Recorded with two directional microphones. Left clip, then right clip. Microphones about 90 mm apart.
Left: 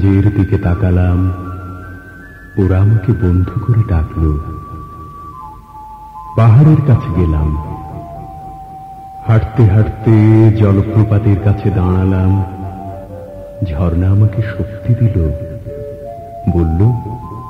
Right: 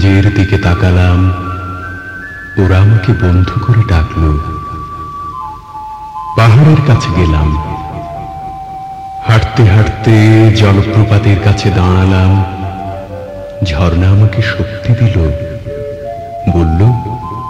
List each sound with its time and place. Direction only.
0.0 s speech: 30° left (ahead or behind)
2.5 s speech: 30° left (ahead or behind)
6.3 s a man's voice: 30° left (ahead or behind)
9.3 s a man's voice: 30° left (ahead or behind)
13.6 s speech: 30° left (ahead or behind)
16.4 s a man's voice: 30° left (ahead or behind)